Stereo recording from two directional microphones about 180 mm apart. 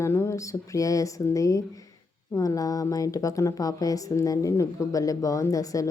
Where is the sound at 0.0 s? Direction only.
15° left (ahead or behind).